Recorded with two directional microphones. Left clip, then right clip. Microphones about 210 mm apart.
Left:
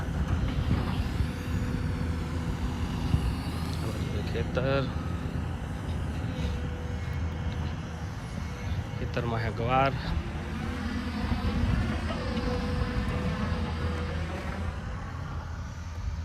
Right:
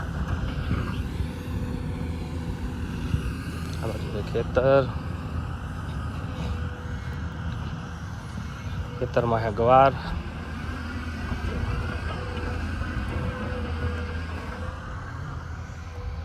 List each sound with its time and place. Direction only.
0.3 s a sound: 50° left (ahead or behind)
1.5 s vehicle: centre (ahead or behind)
3.2 s vehicle: 50° left (ahead or behind)
4.3 s speech: 5° left (ahead or behind)
9.1 s speech: centre (ahead or behind)
10.8 s vehicle: 50° left (ahead or behind)